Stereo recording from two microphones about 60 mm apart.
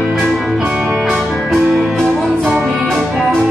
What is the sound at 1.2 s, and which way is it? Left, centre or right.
Music, centre.